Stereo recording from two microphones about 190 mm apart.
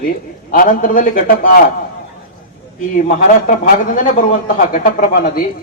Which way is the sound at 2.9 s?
45° left (ahead or behind).